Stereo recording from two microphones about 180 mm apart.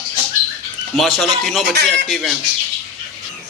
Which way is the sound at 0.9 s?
Centre (ahead or behind).